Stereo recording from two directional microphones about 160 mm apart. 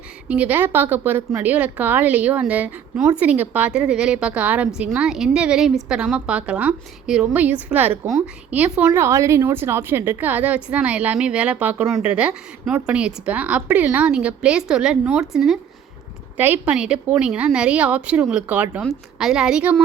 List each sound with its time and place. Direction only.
0.3 s a woman's voice: 10° right (ahead or behind)